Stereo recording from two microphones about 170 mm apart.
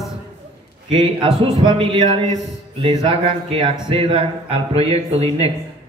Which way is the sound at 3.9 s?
35° right (ahead or behind).